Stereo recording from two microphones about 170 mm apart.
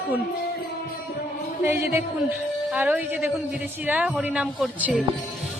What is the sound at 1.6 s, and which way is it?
A woman's voice, 15° right (ahead or behind).